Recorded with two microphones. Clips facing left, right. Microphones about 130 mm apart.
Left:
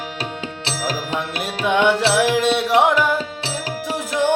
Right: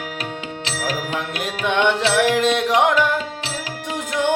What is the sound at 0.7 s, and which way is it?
Music, 30° left (ahead or behind).